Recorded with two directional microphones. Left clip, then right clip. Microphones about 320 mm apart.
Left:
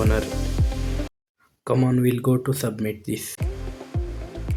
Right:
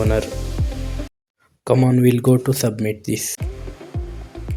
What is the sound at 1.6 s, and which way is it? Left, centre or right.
Speech, left.